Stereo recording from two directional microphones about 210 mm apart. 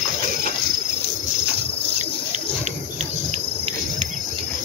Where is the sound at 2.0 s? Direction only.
35° right (ahead or behind).